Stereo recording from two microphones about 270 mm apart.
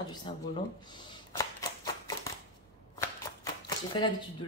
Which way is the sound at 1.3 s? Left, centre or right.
Centre.